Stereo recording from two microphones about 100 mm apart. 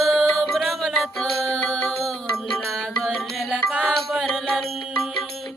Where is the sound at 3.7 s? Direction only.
5° right (ahead or behind).